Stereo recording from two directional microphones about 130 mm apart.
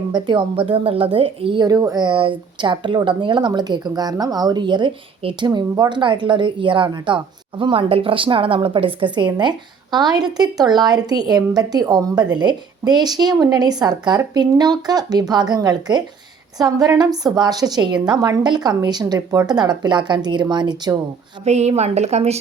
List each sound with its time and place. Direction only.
0.1 s speech: 40° right (ahead or behind)
21.4 s a woman's voice: 60° right (ahead or behind)